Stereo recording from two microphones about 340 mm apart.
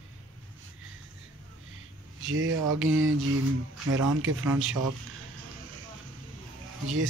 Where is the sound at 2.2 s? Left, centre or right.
Right.